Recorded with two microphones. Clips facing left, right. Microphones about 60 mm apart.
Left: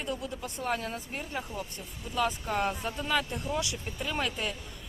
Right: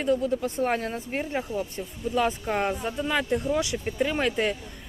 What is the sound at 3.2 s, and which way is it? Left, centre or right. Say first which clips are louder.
Speech: right 8 dB; right.